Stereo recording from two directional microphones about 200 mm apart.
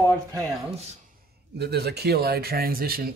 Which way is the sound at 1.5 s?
55° right (ahead or behind).